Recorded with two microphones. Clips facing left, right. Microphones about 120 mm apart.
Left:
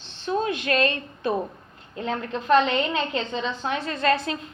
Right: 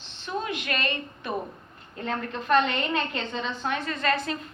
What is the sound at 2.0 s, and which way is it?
A woman's voice, 30° left (ahead or behind).